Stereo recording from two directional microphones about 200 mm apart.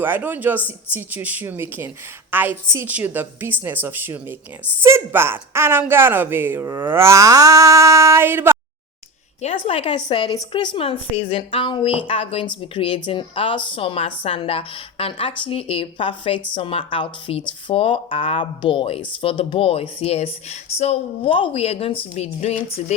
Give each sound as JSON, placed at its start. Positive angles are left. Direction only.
{"t": 0.0, "sound": "a woman's voice", "side_deg": -10}
{"t": 9.4, "sound": "speech", "side_deg": 30}